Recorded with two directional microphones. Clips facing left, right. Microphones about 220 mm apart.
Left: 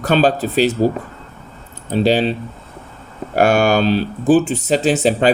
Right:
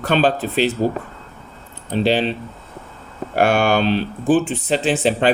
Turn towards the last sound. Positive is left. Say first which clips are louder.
# left 3 dB
turn(degrees=40)  # may be behind; listen again after turning